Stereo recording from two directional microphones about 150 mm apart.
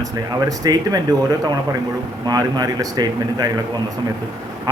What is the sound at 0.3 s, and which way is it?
Speech, 25° right (ahead or behind).